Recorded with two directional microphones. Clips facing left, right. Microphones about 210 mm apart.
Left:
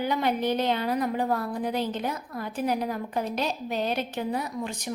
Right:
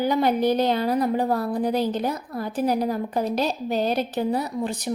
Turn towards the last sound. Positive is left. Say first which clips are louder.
# right 5 dB
turn(degrees=-35)  # may be behind; listen again after turning